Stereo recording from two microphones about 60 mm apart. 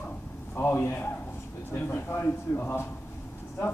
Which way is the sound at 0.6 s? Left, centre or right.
Left.